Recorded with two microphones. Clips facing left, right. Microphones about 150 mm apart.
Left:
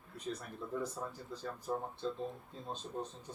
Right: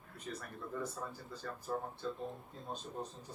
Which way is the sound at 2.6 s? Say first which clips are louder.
Left 2 dB; centre (ahead or behind).